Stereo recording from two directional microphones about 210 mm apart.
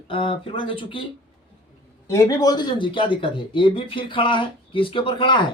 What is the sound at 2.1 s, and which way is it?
Speech, 15° left (ahead or behind).